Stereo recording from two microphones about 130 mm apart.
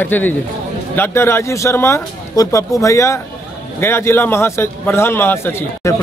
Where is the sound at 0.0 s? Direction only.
15° left (ahead or behind).